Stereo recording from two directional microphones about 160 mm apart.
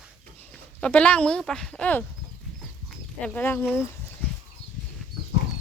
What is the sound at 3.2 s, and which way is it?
Speech, 10° left (ahead or behind).